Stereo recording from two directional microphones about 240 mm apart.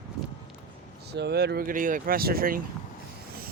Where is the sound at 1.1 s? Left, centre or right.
Right.